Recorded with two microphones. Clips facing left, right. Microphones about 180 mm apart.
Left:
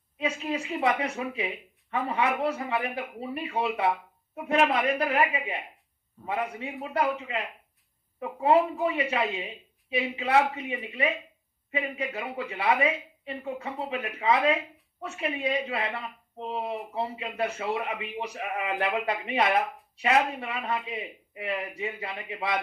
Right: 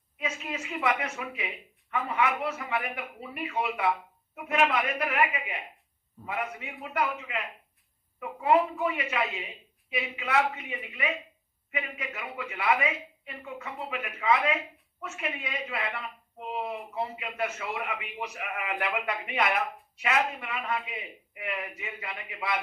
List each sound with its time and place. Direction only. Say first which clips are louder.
0.2 s speech: left 5 dB; 30° left (ahead or behind)